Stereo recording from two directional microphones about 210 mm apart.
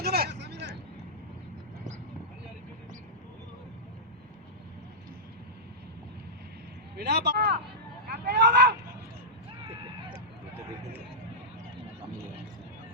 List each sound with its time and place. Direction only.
0.0 s vehicle: 50° right (ahead or behind)
6.9 s speech: 50° right (ahead or behind)
8.0 s vehicle: 50° right (ahead or behind)